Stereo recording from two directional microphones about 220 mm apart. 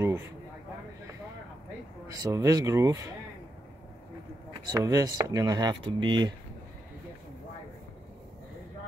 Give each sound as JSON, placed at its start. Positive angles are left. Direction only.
{"t": 2.0, "sound": "speech", "side_deg": -15}
{"t": 4.6, "sound": "speech", "side_deg": -15}